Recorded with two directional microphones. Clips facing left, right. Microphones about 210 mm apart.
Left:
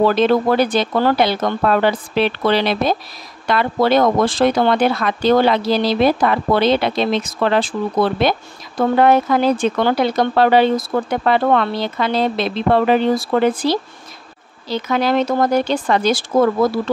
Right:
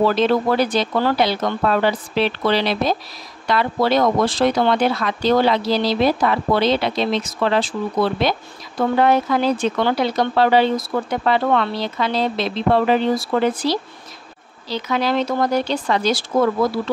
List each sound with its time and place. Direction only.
0.0 s speech: 55° left (ahead or behind)